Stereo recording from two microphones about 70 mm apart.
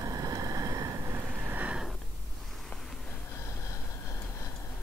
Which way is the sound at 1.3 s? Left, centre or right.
Right.